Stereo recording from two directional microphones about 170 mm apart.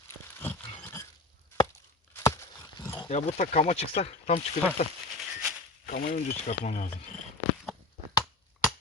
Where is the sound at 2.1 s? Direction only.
15° left (ahead or behind).